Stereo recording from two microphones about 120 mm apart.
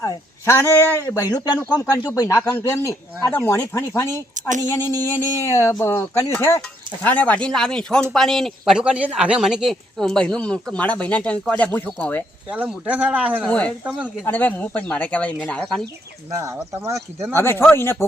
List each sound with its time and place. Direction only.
0.0 s speech: 25° left (ahead or behind)
4.4 s a sound: 90° right
4.6 s speech: 20° left (ahead or behind)
7.0 s speech: 10° left (ahead or behind)
12.5 s speech: 10° right (ahead or behind)
13.4 s speech: 10° left (ahead or behind)
13.8 s speech: 10° right (ahead or behind)
14.3 s speech: 15° left (ahead or behind)
16.3 s speech: 25° right (ahead or behind)
17.3 s speech: 20° left (ahead or behind)